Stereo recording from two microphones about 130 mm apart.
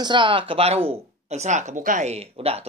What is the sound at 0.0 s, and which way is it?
Speech, 40° right (ahead or behind).